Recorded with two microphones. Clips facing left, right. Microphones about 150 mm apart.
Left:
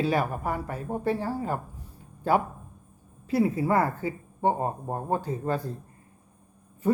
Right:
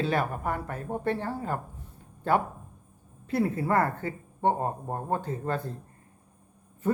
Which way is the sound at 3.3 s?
5° left (ahead or behind).